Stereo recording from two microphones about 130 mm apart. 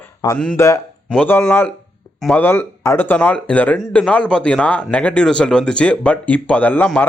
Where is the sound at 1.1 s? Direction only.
10° left (ahead or behind).